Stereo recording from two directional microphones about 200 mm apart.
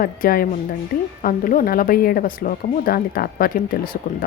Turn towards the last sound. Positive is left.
turn(degrees=45)  # may be behind; listen again after turning